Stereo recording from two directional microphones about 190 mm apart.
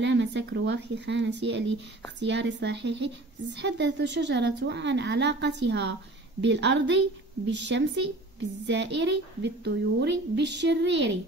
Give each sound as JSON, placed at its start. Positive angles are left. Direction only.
{"t": 0.0, "sound": "a woman's voice", "side_deg": -70}